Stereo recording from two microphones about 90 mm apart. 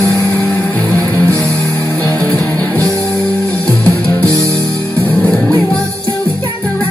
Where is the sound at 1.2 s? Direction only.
35° right (ahead or behind).